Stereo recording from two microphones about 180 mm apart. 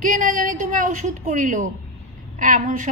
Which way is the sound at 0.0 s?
50° right (ahead or behind).